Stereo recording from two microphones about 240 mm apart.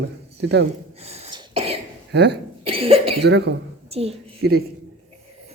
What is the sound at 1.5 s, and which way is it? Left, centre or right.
Cough, right.